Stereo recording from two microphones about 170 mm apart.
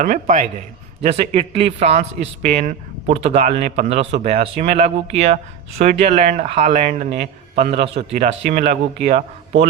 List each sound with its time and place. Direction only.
0.0 s speech: 50° right (ahead or behind)
1.0 s speech: 35° right (ahead or behind)